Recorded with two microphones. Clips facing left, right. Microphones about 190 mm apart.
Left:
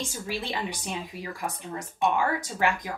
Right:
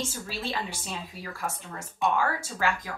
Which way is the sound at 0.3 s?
15° left (ahead or behind).